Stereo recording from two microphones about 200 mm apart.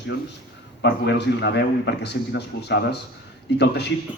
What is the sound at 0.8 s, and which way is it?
A man's voice, 60° left (ahead or behind).